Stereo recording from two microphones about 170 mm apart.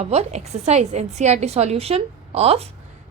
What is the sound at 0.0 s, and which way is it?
A woman's voice, 40° right (ahead or behind).